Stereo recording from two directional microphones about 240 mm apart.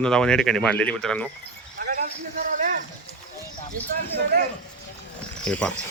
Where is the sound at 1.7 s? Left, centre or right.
Right.